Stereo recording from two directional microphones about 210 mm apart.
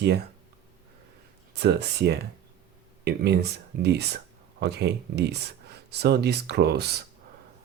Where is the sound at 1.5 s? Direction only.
50° right (ahead or behind).